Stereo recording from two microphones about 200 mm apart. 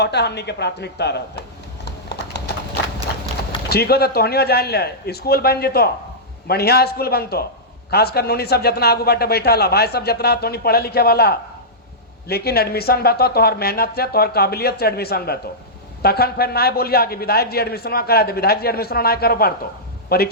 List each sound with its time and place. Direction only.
0.0 s a woman's voice: 55° left (ahead or behind)
3.7 s a man's voice: 50° left (ahead or behind)